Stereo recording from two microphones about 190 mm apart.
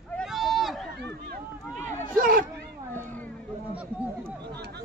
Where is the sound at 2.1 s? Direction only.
50° right (ahead or behind).